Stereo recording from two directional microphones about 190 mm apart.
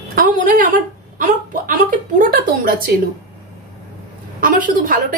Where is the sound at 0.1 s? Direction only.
45° right (ahead or behind).